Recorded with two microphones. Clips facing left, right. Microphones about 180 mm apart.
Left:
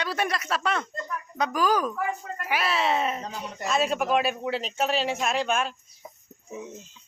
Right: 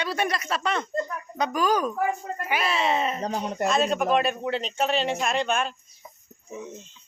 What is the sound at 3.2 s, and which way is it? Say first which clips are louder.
Speech: right 8 dB; 50° right (ahead or behind).